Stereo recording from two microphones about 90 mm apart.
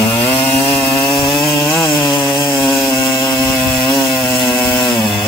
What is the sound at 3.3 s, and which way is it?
Chainsaw, 25° left (ahead or behind).